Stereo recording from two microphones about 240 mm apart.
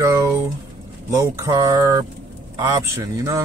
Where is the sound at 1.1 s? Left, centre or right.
Centre.